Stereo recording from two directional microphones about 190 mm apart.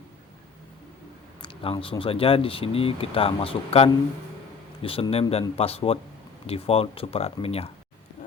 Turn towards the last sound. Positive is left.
turn(degrees=30)  # may be behind; listen again after turning